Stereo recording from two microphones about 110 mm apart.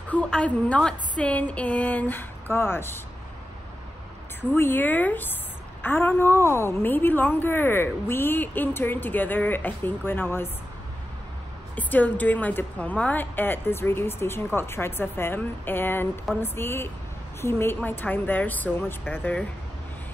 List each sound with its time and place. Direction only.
0.1 s a woman's voice: 10° left (ahead or behind)
4.6 s a woman's voice: 20° left (ahead or behind)
11.7 s a woman's voice: 15° left (ahead or behind)